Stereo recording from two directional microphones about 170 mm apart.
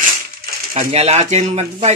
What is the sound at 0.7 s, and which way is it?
Speech, 35° right (ahead or behind).